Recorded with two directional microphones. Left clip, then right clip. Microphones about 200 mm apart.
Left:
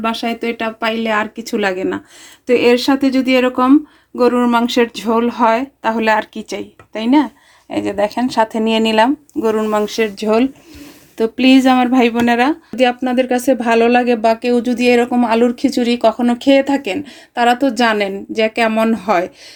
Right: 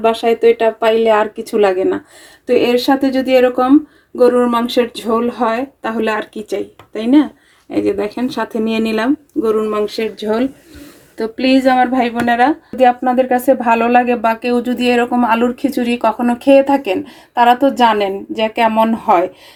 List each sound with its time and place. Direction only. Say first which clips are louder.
0.0 s speech: right 8 dB; 35° left (ahead or behind); by 12.5 s 50° left (ahead or behind)
12.7 s speech: right 3 dB; 30° left (ahead or behind)